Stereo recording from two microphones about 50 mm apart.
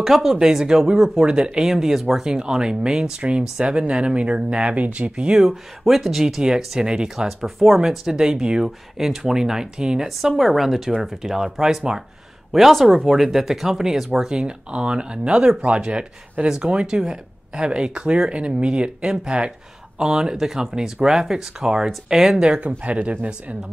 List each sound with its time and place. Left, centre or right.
0.0 s speech: centre
1.6 s speech: centre
2.2 s speech: centre
5.4 s speech: centre
7.2 s speech: centre
22.5 s speech: right